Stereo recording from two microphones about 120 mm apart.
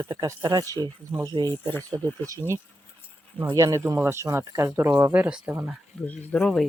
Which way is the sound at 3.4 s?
20° right (ahead or behind).